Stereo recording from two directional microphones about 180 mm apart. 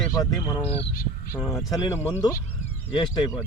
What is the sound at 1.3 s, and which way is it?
Speech, 15° left (ahead or behind).